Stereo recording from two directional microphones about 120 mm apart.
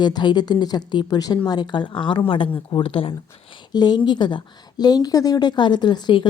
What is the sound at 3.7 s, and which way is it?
A woman's voice, 35° left (ahead or behind).